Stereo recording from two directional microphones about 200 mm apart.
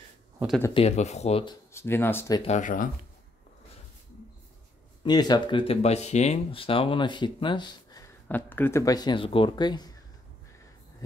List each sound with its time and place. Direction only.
0.7 s speech: 35° left (ahead or behind)
1.7 s speech: 10° left (ahead or behind)
2.4 s speech: 40° left (ahead or behind)
5.0 s speech: 20° left (ahead or behind)